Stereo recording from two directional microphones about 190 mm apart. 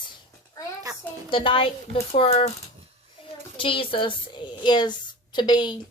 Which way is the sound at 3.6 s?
25° left (ahead or behind).